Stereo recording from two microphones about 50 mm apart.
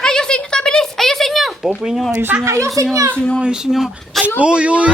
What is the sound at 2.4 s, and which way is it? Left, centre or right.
Speech, right.